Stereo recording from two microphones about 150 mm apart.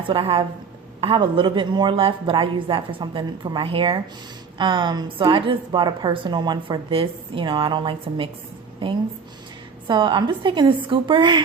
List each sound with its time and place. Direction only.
0.1 s a woman's voice: 35° right (ahead or behind)